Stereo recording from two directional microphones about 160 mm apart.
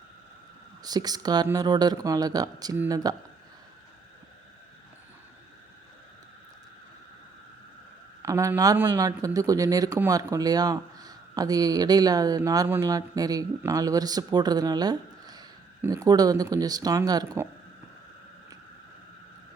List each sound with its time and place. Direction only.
0.8 s speech: 25° right (ahead or behind)
8.2 s speech: 20° right (ahead or behind)